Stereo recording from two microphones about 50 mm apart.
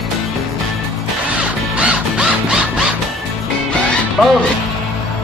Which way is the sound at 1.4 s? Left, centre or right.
Right.